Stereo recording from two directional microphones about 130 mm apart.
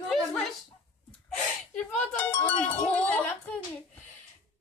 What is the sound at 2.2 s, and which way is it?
Music, 15° left (ahead or behind).